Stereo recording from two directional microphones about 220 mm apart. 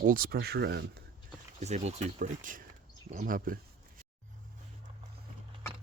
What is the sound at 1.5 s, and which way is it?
Speech, 30° right (ahead or behind).